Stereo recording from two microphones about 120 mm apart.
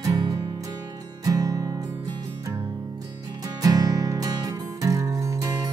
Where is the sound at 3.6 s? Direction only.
30° right (ahead or behind).